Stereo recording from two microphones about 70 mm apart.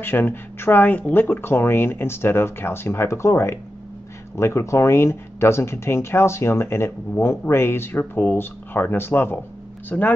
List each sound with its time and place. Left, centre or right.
0.0 s speech: left